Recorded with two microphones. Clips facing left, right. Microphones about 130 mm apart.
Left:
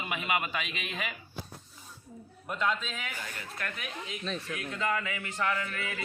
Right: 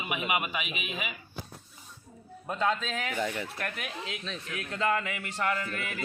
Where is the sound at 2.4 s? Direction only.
35° right (ahead or behind).